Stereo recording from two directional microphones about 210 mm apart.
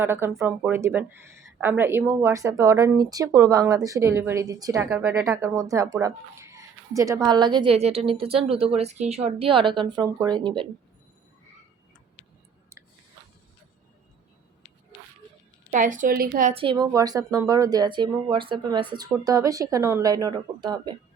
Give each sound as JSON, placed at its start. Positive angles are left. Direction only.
{"t": 0.0, "sound": "speech", "side_deg": -10}
{"t": 15.7, "sound": "speech", "side_deg": -40}
{"t": 16.6, "sound": "speech", "side_deg": -20}